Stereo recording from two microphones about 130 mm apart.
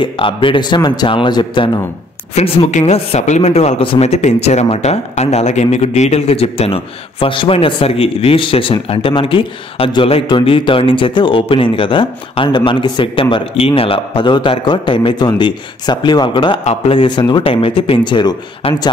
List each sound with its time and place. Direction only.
0.0 s speech: 40° left (ahead or behind)
2.3 s speech: 50° left (ahead or behind)